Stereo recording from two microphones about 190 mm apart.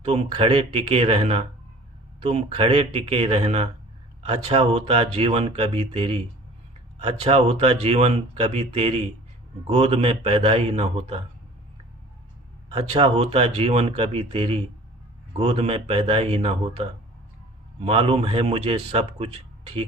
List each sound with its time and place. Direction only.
0.0 s speech: 30° right (ahead or behind)
12.7 s speech: 30° right (ahead or behind)